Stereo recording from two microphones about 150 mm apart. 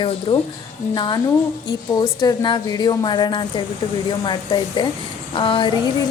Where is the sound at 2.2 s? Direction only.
30° left (ahead or behind).